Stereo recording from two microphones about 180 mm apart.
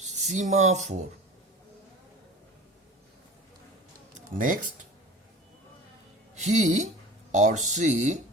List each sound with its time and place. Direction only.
0.0 s speech: 40° right (ahead or behind)
4.1 s speech: 45° right (ahead or behind)
6.3 s speech: 40° right (ahead or behind)